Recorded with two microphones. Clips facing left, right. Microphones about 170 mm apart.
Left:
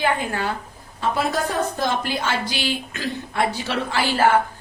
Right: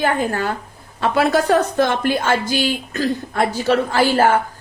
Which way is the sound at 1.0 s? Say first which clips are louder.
Right 6 dB; 75° right (ahead or behind).